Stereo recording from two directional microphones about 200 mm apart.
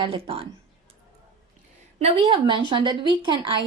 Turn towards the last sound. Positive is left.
turn(degrees=-25)  # may be behind; listen again after turning